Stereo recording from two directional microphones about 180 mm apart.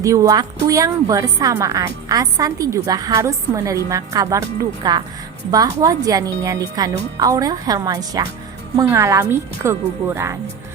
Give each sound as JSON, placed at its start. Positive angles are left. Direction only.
{"t": 0.0, "sound": "a woman's voice", "side_deg": -20}